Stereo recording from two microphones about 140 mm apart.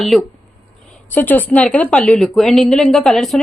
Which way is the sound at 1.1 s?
10° left (ahead or behind).